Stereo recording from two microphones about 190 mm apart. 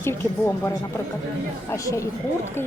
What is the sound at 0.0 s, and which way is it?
Speech, 15° left (ahead or behind).